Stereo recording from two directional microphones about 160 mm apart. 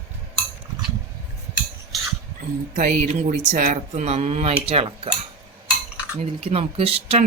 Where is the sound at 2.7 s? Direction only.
50° right (ahead or behind); by 5.0 s 35° right (ahead or behind).